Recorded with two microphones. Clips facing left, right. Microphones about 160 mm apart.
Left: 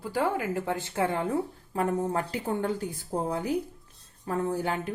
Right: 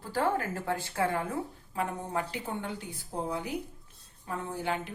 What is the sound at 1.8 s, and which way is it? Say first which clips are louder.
A woman's voice: left 5 dB; 40° left (ahead or behind).